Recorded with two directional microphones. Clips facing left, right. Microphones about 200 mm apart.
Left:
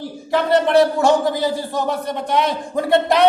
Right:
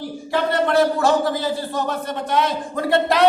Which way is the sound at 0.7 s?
15° left (ahead or behind).